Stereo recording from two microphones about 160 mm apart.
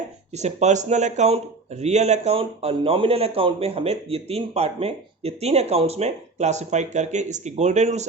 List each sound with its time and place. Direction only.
0.3 s speech: 45° right (ahead or behind)